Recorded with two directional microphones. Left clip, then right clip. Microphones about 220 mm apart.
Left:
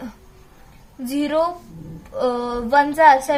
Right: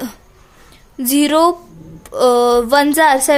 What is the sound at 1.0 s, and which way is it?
A woman's voice, 55° right (ahead or behind).